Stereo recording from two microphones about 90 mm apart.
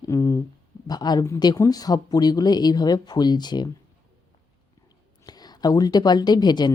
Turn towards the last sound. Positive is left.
turn(degrees=50)  # may be behind; listen again after turning